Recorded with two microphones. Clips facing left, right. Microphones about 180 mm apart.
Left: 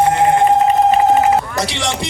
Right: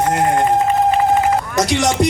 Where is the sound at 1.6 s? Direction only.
45° right (ahead or behind).